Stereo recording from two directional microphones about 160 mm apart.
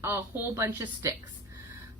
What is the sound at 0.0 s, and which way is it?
A woman's voice, 15° right (ahead or behind).